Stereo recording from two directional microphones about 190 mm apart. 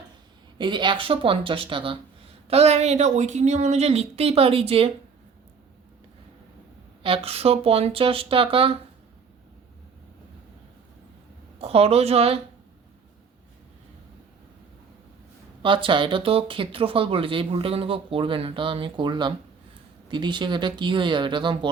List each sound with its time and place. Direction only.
0.6 s speech: 25° right (ahead or behind)
7.0 s speech: 30° right (ahead or behind)
11.6 s speech: 30° right (ahead or behind)
15.6 s speech: 25° right (ahead or behind)